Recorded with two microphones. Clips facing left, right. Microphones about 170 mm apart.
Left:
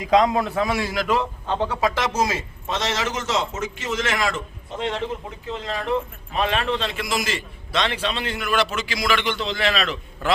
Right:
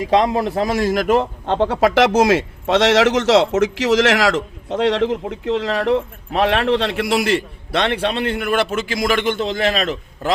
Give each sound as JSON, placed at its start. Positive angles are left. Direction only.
{"t": 0.0, "sound": "a man's voice", "side_deg": -30}